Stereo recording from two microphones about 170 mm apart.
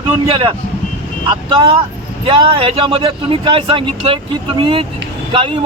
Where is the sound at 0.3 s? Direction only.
30° right (ahead or behind).